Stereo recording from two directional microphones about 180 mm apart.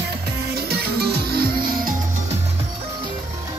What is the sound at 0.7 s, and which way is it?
Music, 60° right (ahead or behind).